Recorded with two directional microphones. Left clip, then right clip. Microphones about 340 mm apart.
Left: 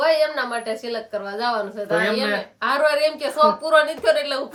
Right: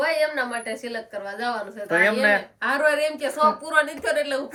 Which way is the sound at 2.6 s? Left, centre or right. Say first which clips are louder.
Left 7 dB; centre.